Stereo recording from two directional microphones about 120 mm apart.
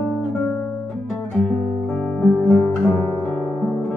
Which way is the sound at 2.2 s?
10° left (ahead or behind).